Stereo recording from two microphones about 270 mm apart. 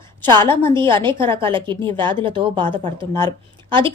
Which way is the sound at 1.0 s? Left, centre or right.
Centre.